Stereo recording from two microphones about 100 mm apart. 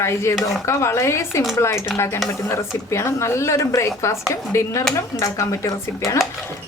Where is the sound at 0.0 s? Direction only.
25° left (ahead or behind).